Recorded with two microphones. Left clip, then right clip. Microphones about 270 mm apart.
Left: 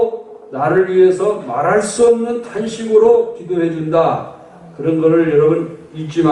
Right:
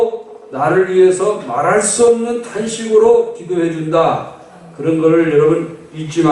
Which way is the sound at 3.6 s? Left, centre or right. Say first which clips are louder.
Even; centre.